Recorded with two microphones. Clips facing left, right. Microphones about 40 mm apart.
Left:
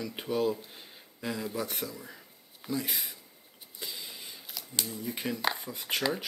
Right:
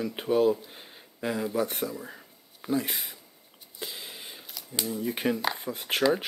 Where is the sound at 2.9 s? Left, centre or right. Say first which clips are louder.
Right 1 dB; centre.